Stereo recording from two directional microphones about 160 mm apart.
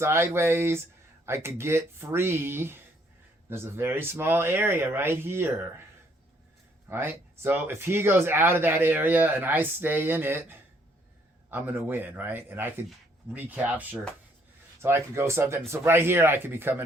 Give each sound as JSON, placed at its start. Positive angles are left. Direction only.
{"t": 0.0, "sound": "speech", "side_deg": -15}
{"t": 6.8, "sound": "speech", "side_deg": -15}